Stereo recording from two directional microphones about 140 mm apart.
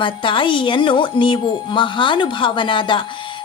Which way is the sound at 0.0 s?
35° left (ahead or behind).